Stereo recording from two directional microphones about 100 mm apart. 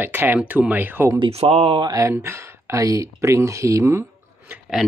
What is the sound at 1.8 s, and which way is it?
Speech, 35° right (ahead or behind).